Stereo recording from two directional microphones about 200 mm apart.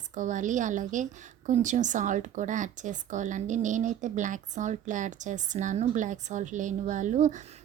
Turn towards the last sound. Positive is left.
turn(degrees=-40)  # may be behind; listen again after turning